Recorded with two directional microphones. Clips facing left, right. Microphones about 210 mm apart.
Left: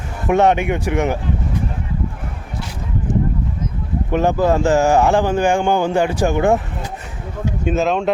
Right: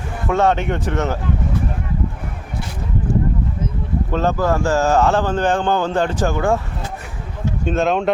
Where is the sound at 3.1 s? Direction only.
20° left (ahead or behind).